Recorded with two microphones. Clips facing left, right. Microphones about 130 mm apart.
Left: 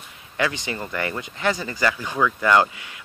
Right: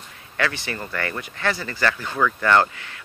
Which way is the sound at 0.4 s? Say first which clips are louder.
Left 1 dB; 20° left (ahead or behind).